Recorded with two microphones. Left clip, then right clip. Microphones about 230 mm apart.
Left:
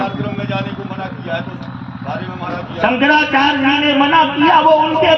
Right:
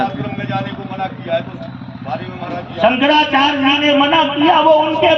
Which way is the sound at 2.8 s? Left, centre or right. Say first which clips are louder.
Right 1 dB; right.